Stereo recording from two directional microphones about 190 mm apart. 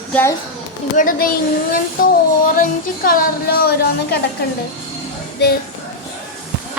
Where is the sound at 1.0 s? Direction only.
50° left (ahead or behind).